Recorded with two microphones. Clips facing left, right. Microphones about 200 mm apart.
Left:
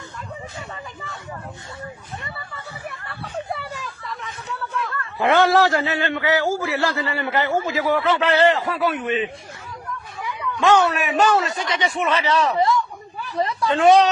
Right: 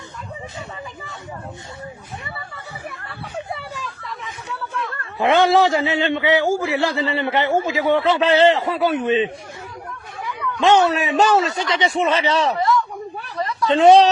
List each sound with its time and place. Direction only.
3.1 s hubbub: centre (ahead or behind)
4.9 s a man's voice: 20° right (ahead or behind)
10.6 s a man's voice: 25° right (ahead or behind)
13.3 s a sound: 30° left (ahead or behind)
13.7 s a man's voice: 30° right (ahead or behind)